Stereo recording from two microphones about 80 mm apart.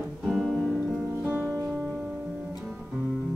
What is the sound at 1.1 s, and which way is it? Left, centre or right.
Music, right.